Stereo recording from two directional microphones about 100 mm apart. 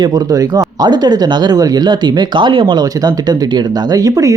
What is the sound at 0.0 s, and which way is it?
Speech, 40° right (ahead or behind).